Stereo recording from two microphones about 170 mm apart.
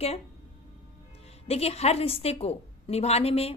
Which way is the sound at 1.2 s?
35° left (ahead or behind).